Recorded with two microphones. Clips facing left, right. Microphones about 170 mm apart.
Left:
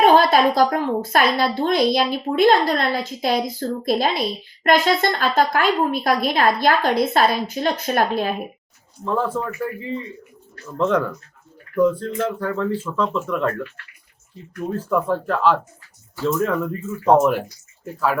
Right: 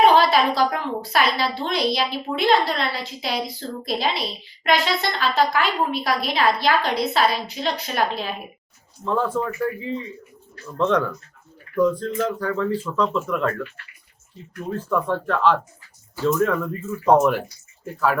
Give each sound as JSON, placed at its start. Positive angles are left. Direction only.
{"t": 0.0, "sound": "a woman's voice", "side_deg": 50}
{"t": 9.0, "sound": "speech", "side_deg": 5}
{"t": 14.8, "sound": "speech", "side_deg": 5}